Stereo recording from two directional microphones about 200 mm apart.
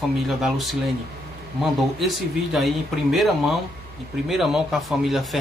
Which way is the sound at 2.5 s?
Centre (ahead or behind).